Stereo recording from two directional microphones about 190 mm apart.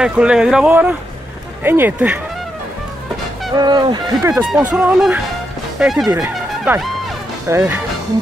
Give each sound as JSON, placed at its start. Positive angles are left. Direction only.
{"t": 0.0, "sound": "speech", "side_deg": -5}
{"t": 3.5, "sound": "speech", "side_deg": -20}
{"t": 4.5, "sound": "speech", "side_deg": -5}
{"t": 6.5, "sound": "music", "side_deg": -5}
{"t": 7.4, "sound": "speech", "side_deg": -10}